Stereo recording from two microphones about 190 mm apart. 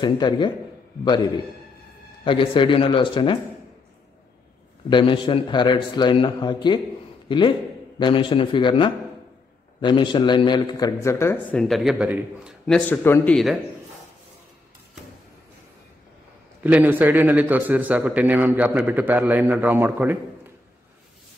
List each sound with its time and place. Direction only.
0.0 s a man's voice: 25° left (ahead or behind)
4.8 s a man's voice: 25° left (ahead or behind)
11.5 s speech: centre (ahead or behind)
12.7 s speech: 10° left (ahead or behind)
16.6 s a man's voice: 10° right (ahead or behind)